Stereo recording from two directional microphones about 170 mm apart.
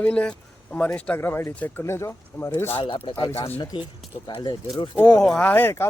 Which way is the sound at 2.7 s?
30° left (ahead or behind).